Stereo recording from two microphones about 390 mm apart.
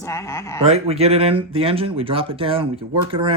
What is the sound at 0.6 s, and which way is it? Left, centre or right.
Speech, centre.